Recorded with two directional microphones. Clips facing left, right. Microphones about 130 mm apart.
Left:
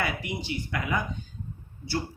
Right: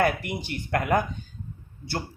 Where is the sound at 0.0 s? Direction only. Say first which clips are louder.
Right 6 dB; 55° right (ahead or behind).